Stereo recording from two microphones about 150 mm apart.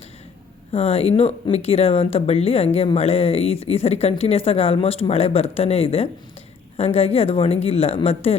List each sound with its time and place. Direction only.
0.7 s speech: 40° left (ahead or behind)